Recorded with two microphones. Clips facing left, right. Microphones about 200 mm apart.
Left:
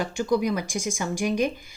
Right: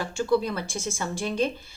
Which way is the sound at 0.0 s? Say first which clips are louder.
Left 1 dB; 15° left (ahead or behind).